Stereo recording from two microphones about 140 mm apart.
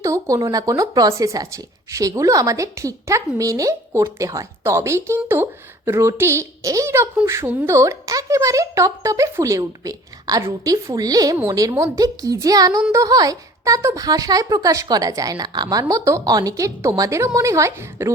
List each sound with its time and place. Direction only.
0.0 s speech: 25° right (ahead or behind)